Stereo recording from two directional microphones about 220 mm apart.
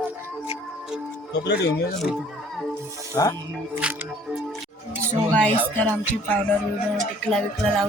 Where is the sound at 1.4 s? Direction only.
50° left (ahead or behind).